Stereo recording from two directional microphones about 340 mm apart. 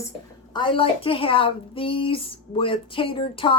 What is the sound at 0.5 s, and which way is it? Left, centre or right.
A woman's voice, centre.